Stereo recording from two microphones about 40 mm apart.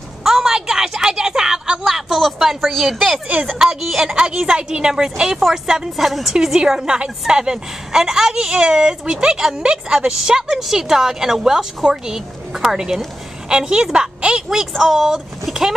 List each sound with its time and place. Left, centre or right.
0.2 s a sound: centre
2.3 s a woman's voice: centre
4.1 s a woman's voice: right
5.9 s a woman's voice: centre
6.4 s a woman's voice: centre
14.7 s a woman's voice: centre